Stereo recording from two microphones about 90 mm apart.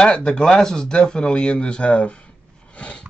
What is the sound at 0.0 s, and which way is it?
Speech, 10° left (ahead or behind).